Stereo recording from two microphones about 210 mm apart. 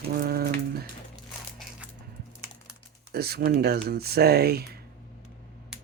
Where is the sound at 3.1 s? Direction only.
50° right (ahead or behind).